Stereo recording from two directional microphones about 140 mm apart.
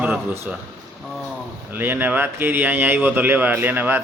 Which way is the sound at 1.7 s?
15° right (ahead or behind).